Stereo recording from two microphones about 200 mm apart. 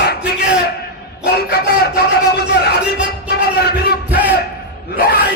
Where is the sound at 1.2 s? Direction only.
50° left (ahead or behind).